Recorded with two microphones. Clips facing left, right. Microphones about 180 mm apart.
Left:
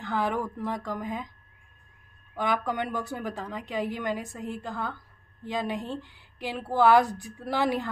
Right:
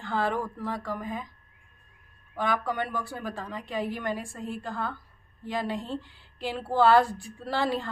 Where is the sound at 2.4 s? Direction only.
15° left (ahead or behind).